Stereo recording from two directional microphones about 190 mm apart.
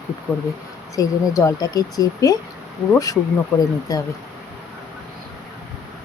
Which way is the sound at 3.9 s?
20° left (ahead or behind).